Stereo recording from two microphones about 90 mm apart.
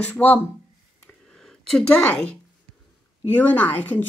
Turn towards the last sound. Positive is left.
turn(degrees=20)  # may be behind; listen again after turning